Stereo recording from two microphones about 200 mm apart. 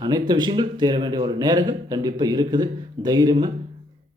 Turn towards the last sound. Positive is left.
turn(degrees=-20)  # may be behind; listen again after turning